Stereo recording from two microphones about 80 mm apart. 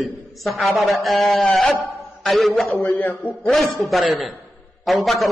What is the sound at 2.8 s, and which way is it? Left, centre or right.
Speech, left.